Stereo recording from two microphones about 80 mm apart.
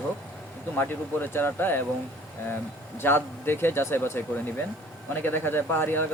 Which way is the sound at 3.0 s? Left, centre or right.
Left.